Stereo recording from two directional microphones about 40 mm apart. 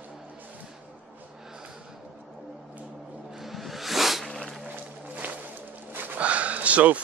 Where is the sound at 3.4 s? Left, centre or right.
Centre.